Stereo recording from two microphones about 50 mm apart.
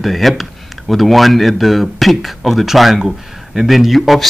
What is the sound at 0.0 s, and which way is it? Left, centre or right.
Speech, centre.